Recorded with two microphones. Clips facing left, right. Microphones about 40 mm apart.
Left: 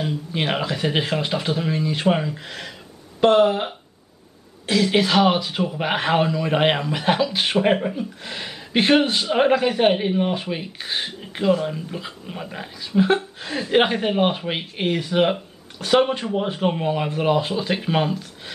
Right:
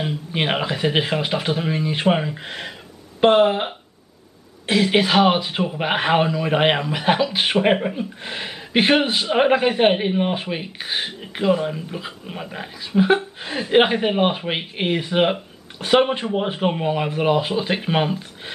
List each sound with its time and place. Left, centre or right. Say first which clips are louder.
0.0 s a woman's voice: right 1 dB; right